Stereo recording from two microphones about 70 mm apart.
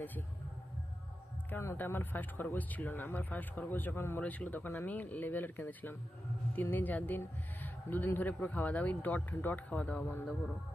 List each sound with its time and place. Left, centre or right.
1.5 s speech: left
4.2 s speech: left